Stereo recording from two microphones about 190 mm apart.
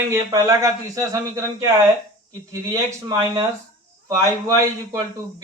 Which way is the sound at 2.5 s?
15° right (ahead or behind).